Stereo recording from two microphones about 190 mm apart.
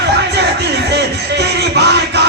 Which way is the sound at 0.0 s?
60° right (ahead or behind).